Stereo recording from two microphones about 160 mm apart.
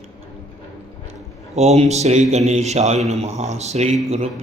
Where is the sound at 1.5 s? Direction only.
40° right (ahead or behind).